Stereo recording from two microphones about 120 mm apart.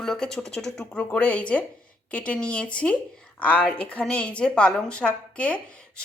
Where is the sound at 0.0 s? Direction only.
5° left (ahead or behind).